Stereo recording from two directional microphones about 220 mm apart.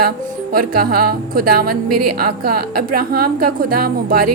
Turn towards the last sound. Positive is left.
turn(degrees=-40)  # may be behind; listen again after turning